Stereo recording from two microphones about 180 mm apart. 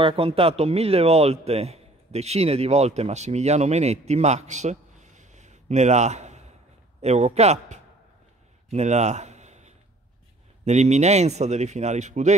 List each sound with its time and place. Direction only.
0.0 s speech: 30° right (ahead or behind)
8.6 s a sound: 40° right (ahead or behind)
10.6 s speech: 40° right (ahead or behind)